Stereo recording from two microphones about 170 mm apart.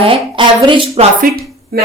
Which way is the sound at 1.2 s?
60° right (ahead or behind).